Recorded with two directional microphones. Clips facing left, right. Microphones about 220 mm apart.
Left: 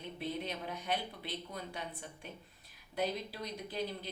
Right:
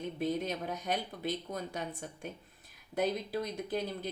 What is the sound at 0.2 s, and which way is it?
A woman's voice, 45° right (ahead or behind).